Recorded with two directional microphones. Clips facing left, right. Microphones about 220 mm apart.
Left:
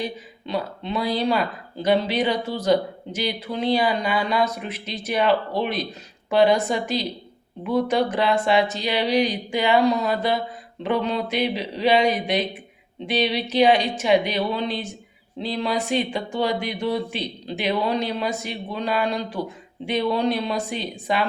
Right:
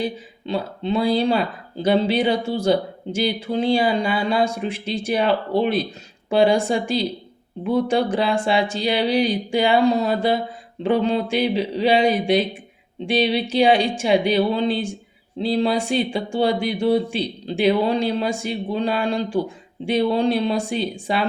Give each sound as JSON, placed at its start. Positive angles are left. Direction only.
{"t": 0.0, "sound": "speech", "side_deg": -30}